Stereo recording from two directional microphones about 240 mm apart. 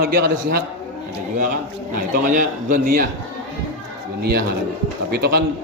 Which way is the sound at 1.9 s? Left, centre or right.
Right.